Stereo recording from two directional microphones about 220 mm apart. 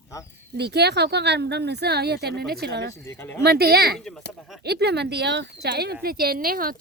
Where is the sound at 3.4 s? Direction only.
45° right (ahead or behind).